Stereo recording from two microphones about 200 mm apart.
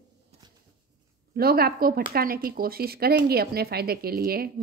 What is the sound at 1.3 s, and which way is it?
A woman's voice, 50° right (ahead or behind).